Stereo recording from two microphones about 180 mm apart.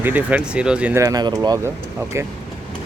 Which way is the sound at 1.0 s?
20° right (ahead or behind).